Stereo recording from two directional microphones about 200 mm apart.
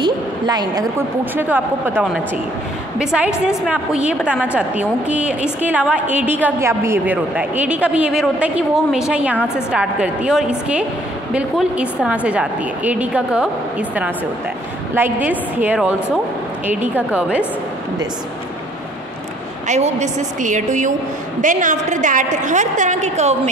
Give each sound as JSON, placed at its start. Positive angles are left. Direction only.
{"t": 0.0, "sound": "a woman's voice", "side_deg": -20}
{"t": 19.7, "sound": "a woman's voice", "side_deg": -35}